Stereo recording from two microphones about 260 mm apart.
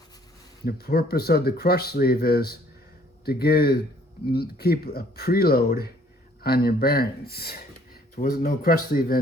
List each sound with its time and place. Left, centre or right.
0.6 s speech: left